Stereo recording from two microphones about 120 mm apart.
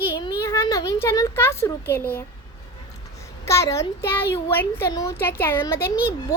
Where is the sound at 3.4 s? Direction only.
25° left (ahead or behind).